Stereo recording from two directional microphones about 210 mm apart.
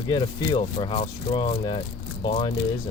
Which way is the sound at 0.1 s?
20° left (ahead or behind).